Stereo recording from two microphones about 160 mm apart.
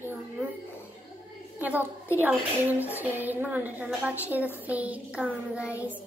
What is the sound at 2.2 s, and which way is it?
A woman's voice, 10° right (ahead or behind).